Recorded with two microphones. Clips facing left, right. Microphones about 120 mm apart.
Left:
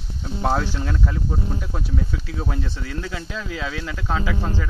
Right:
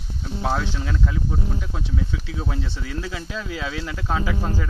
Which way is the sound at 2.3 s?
Centre (ahead or behind).